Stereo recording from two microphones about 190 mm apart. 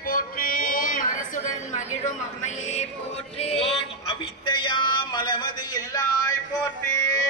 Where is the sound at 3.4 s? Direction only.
30° left (ahead or behind).